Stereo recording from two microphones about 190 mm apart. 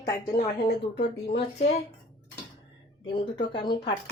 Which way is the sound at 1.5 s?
35° left (ahead or behind).